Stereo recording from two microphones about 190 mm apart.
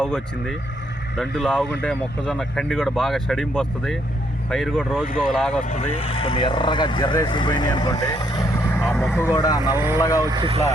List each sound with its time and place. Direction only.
0.0 s speech: 5° left (ahead or behind)
5.6 s speech: 40° left (ahead or behind); by 8.8 s 20° left (ahead or behind)
8.8 s speech: 5° left (ahead or behind); by 9.7 s 20° left (ahead or behind)
9.7 s speech: 15° right (ahead or behind); by 10.7 s 30° right (ahead or behind)